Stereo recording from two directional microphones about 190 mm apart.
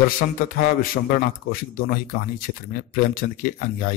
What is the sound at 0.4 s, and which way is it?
A man's voice, 50° left (ahead or behind).